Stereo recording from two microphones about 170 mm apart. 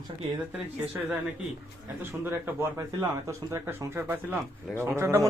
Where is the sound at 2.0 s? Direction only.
15° right (ahead or behind).